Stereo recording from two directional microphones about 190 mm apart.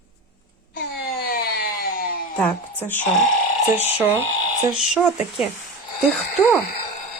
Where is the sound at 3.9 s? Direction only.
10° right (ahead or behind).